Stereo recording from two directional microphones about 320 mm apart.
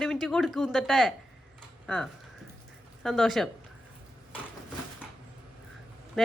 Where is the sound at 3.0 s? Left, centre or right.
Centre.